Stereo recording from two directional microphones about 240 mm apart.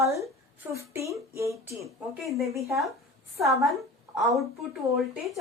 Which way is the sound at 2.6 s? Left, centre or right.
Centre.